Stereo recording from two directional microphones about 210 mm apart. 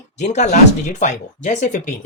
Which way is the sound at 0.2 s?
35° left (ahead or behind).